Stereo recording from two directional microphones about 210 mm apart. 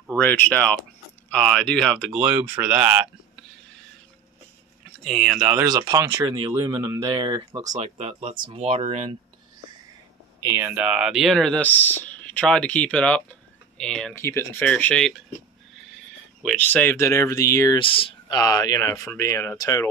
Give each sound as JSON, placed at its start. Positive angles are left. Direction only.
{"t": 0.1, "sound": "speech", "side_deg": 10}
{"t": 5.0, "sound": "speech", "side_deg": 0}
{"t": 10.4, "sound": "speech", "side_deg": -15}
{"t": 16.4, "sound": "speech", "side_deg": 10}